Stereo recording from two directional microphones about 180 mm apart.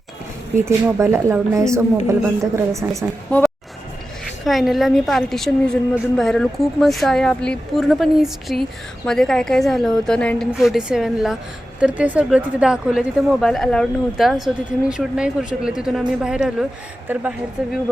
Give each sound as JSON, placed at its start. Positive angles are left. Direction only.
{"t": 0.6, "sound": "speech", "side_deg": -15}
{"t": 3.2, "sound": "a sound", "side_deg": 5}
{"t": 4.4, "sound": "a woman's voice", "side_deg": 0}